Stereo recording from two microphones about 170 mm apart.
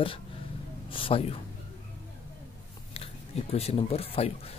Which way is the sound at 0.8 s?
30° left (ahead or behind).